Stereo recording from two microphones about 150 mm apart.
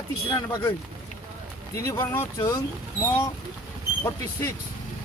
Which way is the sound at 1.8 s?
20° left (ahead or behind).